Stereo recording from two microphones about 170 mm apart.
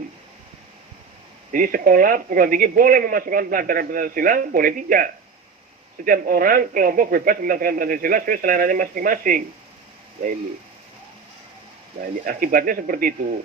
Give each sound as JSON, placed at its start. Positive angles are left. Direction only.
{"t": 1.5, "sound": "speech", "side_deg": -55}
{"t": 6.1, "sound": "speech", "side_deg": -55}
{"t": 12.2, "sound": "speech", "side_deg": -55}